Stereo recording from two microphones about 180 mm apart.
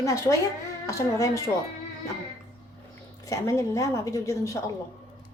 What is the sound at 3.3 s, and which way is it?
A woman's voice, 15° left (ahead or behind).